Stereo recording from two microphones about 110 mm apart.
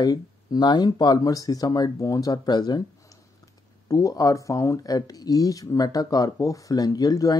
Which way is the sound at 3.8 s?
30° left (ahead or behind).